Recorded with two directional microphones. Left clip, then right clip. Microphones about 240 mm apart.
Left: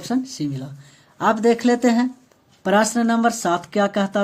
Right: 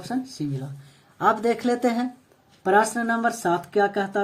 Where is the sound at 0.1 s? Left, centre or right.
Left.